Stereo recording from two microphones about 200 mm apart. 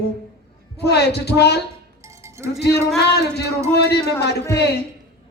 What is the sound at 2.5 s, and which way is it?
A woman's voice, 55° left (ahead or behind).